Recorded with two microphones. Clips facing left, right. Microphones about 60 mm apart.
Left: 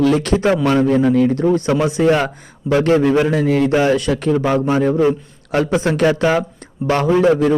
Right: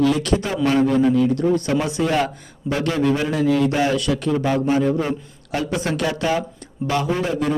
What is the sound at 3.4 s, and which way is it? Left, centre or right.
Speech, left.